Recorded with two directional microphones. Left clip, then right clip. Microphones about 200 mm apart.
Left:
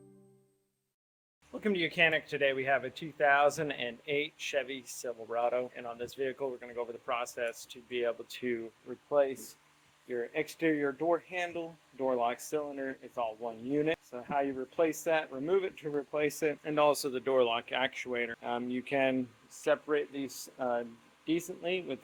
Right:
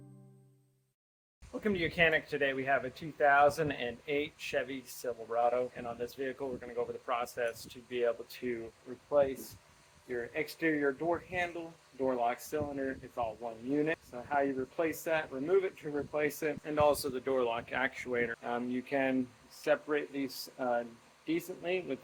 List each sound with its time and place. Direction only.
1.6 s speech: 35° left (ahead or behind)
10.3 s speech: 45° left (ahead or behind)